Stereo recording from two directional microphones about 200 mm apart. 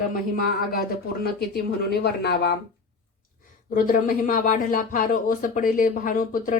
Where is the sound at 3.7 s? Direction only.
40° left (ahead or behind).